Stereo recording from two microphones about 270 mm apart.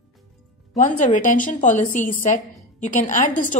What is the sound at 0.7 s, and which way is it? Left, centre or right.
A woman's voice, left.